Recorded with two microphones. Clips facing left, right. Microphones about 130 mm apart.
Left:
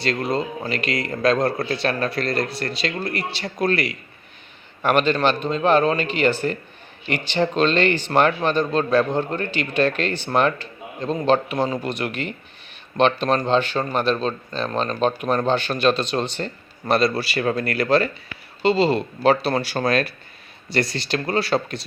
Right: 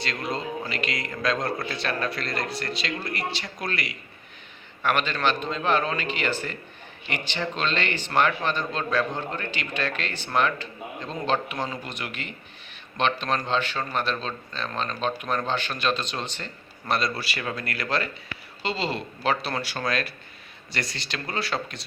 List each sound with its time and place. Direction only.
0.0 s speech: 35° left (ahead or behind)
13.9 s speech: 55° left (ahead or behind); by 21.8 s 35° left (ahead or behind)